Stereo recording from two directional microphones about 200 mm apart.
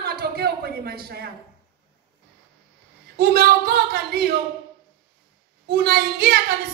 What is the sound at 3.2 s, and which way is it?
A woman's voice, 50° right (ahead or behind).